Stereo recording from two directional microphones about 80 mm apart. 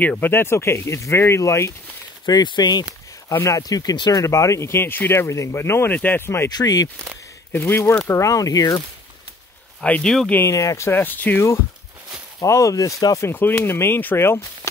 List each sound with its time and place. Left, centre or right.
0.2 s speech: left
2.2 s speech: left
3.3 s speech: left
4.2 s speech: left
5.9 s speech: left
6.5 s speech: left
7.5 s speech: left
8.1 s speech: left
9.8 s speech: centre
10.0 s speech: centre
10.4 s speech: left
12.4 s speech: left
13.3 s speech: left